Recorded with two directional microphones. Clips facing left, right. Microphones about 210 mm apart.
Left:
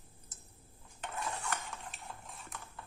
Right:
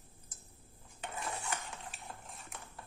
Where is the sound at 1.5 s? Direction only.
Centre (ahead or behind).